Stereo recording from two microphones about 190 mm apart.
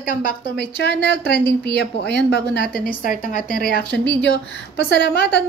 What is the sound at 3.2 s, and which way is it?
A woman's voice, 50° left (ahead or behind).